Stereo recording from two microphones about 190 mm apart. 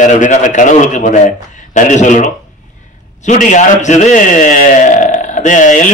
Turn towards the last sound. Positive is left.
turn(degrees=40)  # may be behind; listen again after turning